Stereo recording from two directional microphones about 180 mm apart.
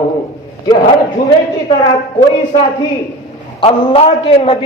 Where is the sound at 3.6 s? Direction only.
30° left (ahead or behind).